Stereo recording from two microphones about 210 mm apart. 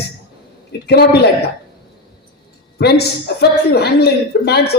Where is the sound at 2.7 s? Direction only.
50° left (ahead or behind).